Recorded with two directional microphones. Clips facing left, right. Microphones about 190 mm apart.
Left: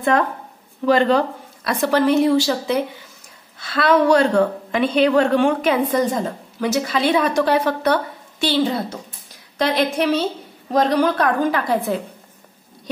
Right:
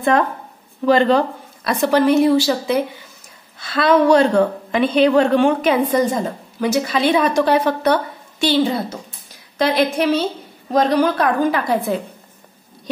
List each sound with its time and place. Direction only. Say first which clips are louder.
0.8 s a woman's voice: right 2 dB; 25° right (ahead or behind); by 2.8 s 10° right (ahead or behind)
3.7 s a woman's voice: right 2 dB; 20° right (ahead or behind)
9.6 s a woman's voice: right 2 dB; 5° right (ahead or behind)